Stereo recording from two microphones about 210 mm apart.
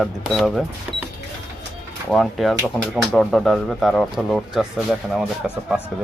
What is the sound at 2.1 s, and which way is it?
Speech, centre (ahead or behind).